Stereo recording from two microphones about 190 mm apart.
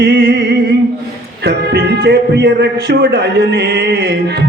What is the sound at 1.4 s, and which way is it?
Music, 55° right (ahead or behind).